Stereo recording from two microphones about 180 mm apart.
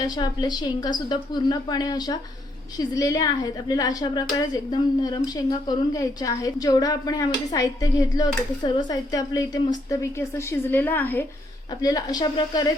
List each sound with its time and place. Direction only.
0.0 s a woman's voice: 25° left (ahead or behind)